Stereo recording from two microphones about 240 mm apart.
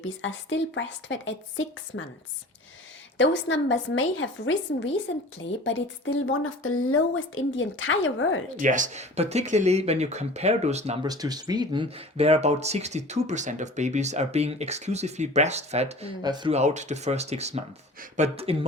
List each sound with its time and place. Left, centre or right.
0.0 s a woman's voice: left
3.2 s a woman's voice: left
8.5 s speech: right